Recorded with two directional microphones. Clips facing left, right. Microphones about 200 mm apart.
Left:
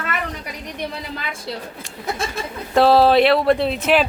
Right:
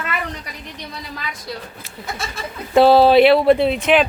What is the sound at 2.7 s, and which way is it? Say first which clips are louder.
Speech: right 2 dB; centre (ahead or behind).